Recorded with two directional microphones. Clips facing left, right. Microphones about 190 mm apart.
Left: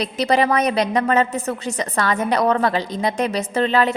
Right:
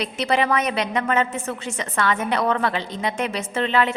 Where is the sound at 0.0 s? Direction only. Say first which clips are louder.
Left 3 dB; 35° left (ahead or behind).